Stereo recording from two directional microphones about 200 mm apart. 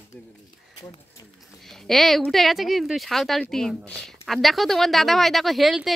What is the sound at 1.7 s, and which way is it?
Speech, centre (ahead or behind).